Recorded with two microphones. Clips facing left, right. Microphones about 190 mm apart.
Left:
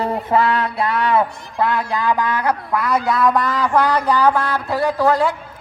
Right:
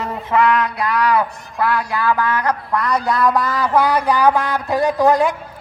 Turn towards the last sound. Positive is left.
turn(degrees=-15)  # may be behind; listen again after turning